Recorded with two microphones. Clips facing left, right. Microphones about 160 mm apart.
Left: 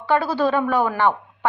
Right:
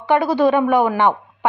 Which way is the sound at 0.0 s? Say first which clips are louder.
Right 4 dB; 15° right (ahead or behind).